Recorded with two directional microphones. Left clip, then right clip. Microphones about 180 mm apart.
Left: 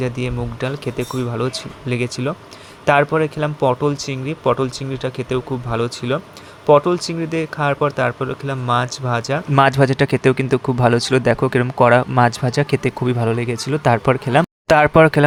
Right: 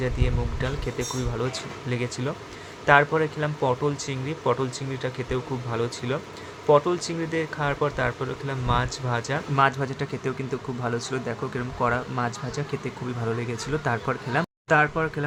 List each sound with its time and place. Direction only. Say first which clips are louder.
0.0 s speech: left 6 dB; 35° left (ahead or behind)
9.6 s speech: left 9 dB; 50° left (ahead or behind)
14.8 s speech: left 14 dB; 60° left (ahead or behind)